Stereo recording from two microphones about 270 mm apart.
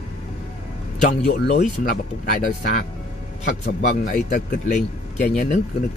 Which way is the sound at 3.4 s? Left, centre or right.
Left.